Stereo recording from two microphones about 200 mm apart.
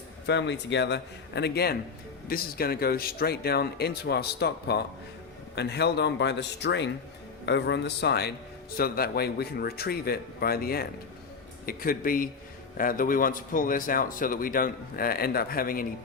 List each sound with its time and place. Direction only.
0.3 s a man's voice: 60° left (ahead or behind)